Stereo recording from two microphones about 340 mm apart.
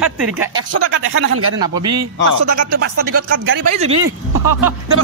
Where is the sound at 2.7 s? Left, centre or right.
Right.